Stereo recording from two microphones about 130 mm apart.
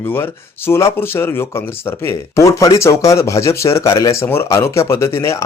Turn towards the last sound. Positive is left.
turn(degrees=20)  # may be behind; listen again after turning